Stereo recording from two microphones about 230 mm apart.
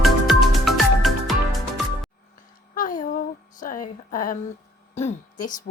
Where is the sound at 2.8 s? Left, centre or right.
Left.